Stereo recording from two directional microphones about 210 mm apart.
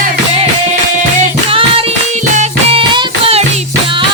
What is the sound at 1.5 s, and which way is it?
Music, 25° right (ahead or behind).